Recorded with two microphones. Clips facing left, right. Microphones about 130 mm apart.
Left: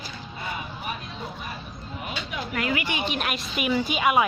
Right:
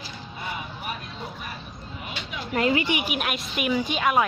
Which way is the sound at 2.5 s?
25° right (ahead or behind).